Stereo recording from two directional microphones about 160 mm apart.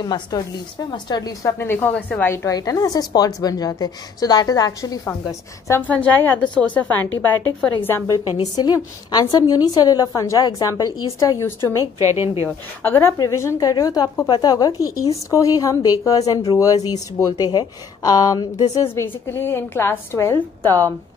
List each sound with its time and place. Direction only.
0.0 s a woman's voice: 25° left (ahead or behind)
5.7 s a woman's voice: 10° left (ahead or behind)
8.5 s a woman's voice: 25° left (ahead or behind)
12.0 s a woman's voice: 15° right (ahead or behind)
12.8 s a woman's voice: 15° left (ahead or behind)